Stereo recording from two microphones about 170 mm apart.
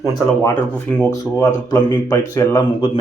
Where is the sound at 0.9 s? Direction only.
10° left (ahead or behind).